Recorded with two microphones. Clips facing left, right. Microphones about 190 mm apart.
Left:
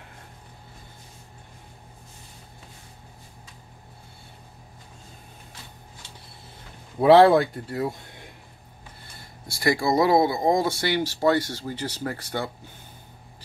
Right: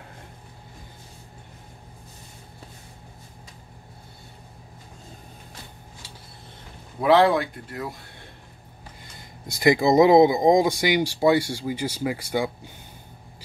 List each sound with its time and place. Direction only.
7.0 s speech: 30° left (ahead or behind)
9.5 s speech: 20° right (ahead or behind)